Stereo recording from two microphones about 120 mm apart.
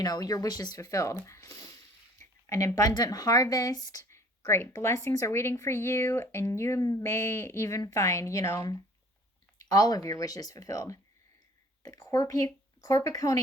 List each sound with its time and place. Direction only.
0.0 s speech: 30° left (ahead or behind)